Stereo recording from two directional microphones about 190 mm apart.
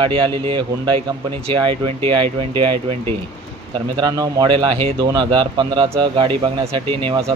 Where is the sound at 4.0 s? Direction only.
20° right (ahead or behind).